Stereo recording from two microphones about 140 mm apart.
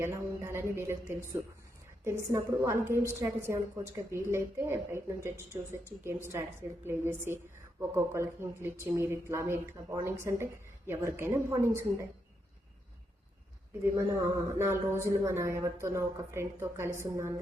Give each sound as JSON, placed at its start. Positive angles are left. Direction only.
{"t": 0.0, "sound": "a woman's voice", "side_deg": -20}
{"t": 14.6, "sound": "speech", "side_deg": -20}